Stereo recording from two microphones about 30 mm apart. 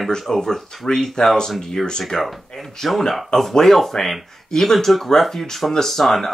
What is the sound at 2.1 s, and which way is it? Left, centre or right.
Speech, centre.